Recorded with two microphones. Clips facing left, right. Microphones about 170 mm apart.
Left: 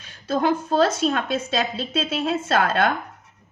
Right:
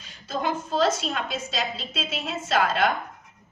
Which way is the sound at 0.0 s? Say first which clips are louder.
Left 6 dB; 60° left (ahead or behind).